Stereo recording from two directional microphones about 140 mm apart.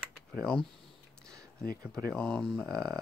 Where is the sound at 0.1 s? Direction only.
Centre (ahead or behind).